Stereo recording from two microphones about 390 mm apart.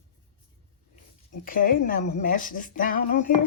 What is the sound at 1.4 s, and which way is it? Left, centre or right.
Speech, left.